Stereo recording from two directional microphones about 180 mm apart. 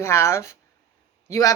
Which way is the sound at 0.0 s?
15° left (ahead or behind).